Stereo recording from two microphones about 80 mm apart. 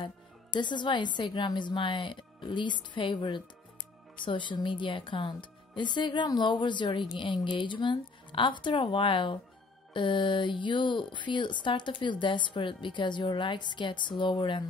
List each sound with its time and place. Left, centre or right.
0.6 s speech: left